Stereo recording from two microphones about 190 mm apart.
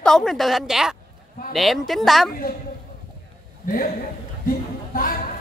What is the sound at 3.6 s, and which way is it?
Speech, 50° left (ahead or behind).